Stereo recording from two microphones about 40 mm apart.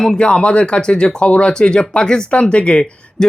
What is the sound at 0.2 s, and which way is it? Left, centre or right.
Speech, left.